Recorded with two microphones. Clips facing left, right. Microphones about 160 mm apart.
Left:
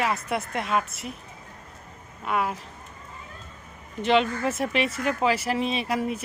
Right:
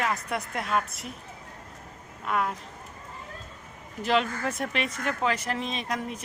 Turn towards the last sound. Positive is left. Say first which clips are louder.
# left 5 dB
turn(degrees=10)  # may be behind; listen again after turning